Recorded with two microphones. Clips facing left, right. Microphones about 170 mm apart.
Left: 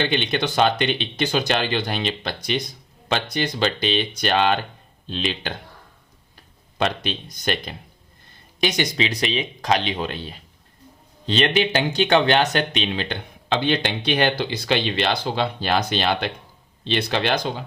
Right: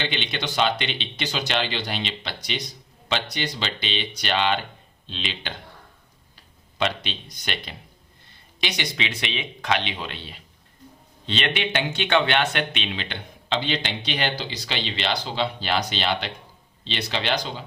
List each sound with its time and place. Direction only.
0.0 s speech: 50° left (ahead or behind)
6.7 s speech: 45° left (ahead or behind)